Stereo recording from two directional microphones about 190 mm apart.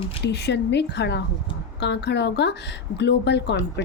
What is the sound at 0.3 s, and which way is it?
A woman's voice, 65° left (ahead or behind).